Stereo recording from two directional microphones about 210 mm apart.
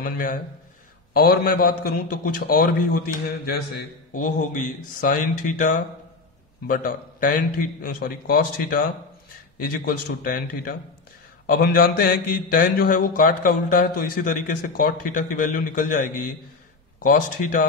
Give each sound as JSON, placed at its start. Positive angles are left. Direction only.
{"t": 0.0, "sound": "speech", "side_deg": 40}